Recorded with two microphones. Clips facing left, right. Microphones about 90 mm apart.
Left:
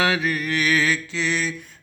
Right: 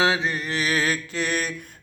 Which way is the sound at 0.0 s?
25° right (ahead or behind).